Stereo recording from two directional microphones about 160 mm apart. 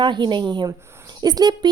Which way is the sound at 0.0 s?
30° right (ahead or behind).